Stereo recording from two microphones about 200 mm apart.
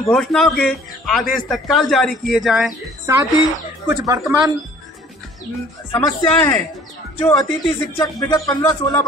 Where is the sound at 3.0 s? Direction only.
15° right (ahead or behind).